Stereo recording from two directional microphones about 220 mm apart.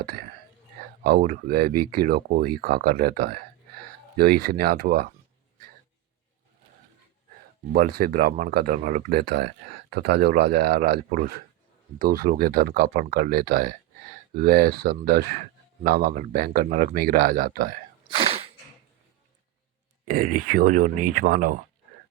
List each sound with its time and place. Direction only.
1.0 s speech: 40° right (ahead or behind)
7.7 s speech: 45° right (ahead or behind)
18.1 s sneeze: 25° right (ahead or behind)
20.1 s speech: 40° right (ahead or behind)